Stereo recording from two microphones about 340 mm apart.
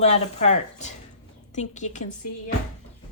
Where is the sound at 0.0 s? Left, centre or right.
Centre.